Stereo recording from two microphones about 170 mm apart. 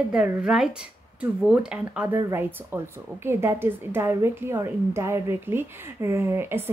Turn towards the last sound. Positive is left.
turn(degrees=-15)  # may be behind; listen again after turning